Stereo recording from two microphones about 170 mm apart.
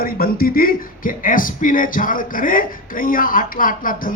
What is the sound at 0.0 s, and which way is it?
Speech, 60° left (ahead or behind).